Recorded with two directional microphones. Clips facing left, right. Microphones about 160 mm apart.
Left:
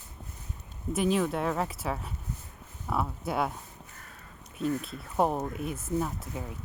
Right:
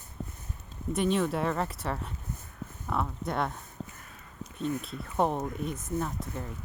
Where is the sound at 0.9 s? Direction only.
Centre (ahead or behind).